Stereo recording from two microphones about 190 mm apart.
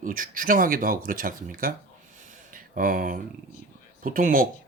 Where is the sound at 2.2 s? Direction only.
45° right (ahead or behind).